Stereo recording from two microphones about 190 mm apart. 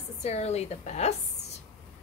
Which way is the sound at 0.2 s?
35° left (ahead or behind).